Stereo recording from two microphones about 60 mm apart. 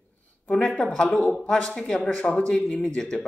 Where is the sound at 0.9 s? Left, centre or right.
Centre.